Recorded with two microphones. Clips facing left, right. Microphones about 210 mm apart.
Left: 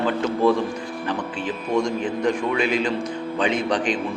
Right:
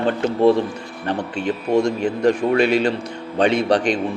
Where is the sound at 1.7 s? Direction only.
65° right (ahead or behind).